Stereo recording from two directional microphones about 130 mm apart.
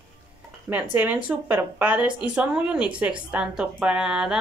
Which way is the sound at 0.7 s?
20° right (ahead or behind).